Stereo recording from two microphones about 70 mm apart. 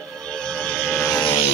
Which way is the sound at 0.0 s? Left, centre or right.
Centre.